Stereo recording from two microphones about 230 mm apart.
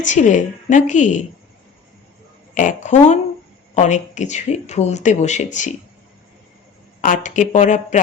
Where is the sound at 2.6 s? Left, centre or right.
Left.